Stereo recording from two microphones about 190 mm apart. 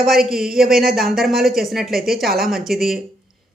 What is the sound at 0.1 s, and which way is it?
A woman's voice, centre (ahead or behind).